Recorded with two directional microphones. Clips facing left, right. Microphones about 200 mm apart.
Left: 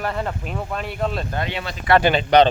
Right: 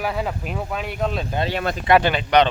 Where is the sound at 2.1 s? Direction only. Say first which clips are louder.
Left 3 dB; 30° left (ahead or behind).